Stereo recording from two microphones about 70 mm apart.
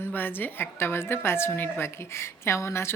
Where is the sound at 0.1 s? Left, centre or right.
Left.